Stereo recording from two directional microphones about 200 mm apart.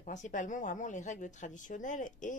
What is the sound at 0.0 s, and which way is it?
Speech, 40° left (ahead or behind).